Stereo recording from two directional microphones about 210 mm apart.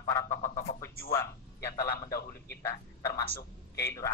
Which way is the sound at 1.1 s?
15° left (ahead or behind).